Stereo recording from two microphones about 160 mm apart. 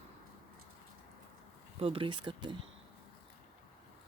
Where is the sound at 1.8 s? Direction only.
35° right (ahead or behind).